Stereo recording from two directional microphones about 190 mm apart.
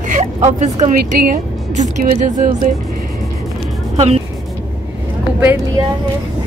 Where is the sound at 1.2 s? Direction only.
50° right (ahead or behind).